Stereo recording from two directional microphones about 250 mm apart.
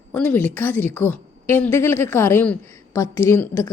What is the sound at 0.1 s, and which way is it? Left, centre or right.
A woman's voice, centre.